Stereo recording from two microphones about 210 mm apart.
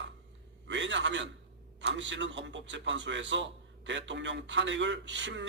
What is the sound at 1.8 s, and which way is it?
A man's voice, 60° right (ahead or behind).